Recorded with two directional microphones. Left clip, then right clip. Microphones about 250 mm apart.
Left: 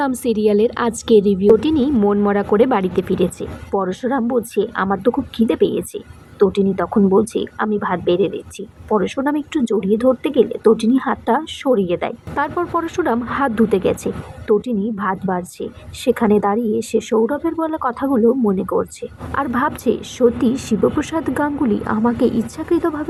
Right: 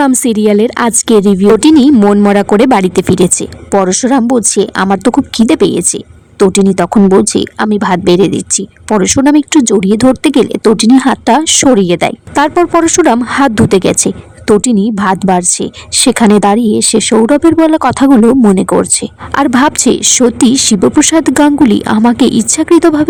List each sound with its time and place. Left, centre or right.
0.0 s speech: right